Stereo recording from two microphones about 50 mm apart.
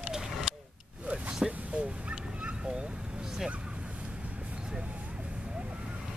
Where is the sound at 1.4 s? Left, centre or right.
Right.